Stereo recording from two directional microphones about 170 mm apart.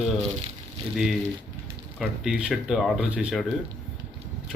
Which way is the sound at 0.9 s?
Centre (ahead or behind).